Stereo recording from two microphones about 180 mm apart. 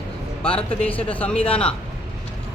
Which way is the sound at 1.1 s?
10° left (ahead or behind).